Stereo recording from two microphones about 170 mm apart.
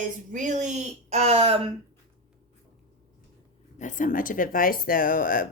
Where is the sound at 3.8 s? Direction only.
50° left (ahead or behind).